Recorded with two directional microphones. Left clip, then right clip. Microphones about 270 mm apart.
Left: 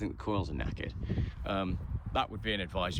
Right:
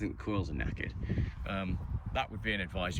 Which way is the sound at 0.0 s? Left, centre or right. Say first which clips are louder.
Left 2 dB; centre.